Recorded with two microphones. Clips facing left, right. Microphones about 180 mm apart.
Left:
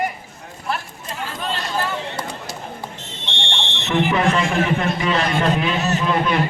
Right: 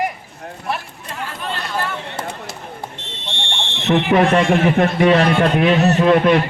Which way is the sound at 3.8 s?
60° right (ahead or behind).